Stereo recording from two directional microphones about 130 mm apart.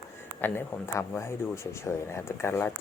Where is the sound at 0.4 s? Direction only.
20° left (ahead or behind).